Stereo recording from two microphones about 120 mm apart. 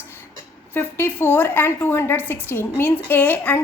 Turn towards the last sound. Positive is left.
turn(degrees=15)  # may be behind; listen again after turning